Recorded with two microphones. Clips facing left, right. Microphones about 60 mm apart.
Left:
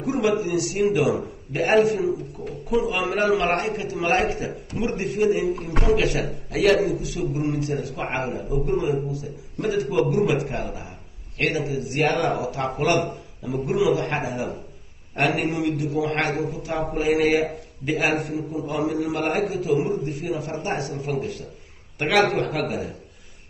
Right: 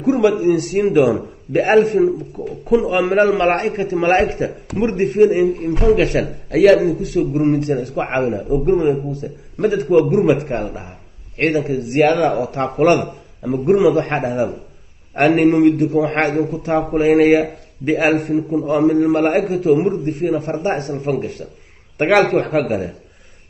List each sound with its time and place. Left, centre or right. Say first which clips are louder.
0.4 s a man's voice: right 7 dB; right
5.6 s speech: right 7 dB; left
5.9 s a man's voice: right 7 dB; right
20.2 s a man's voice: right 9 dB; right